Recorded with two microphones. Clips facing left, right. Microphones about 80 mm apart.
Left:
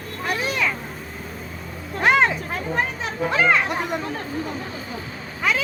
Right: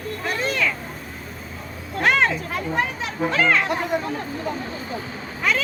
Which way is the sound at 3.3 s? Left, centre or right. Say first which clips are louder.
Left 1 dB; centre.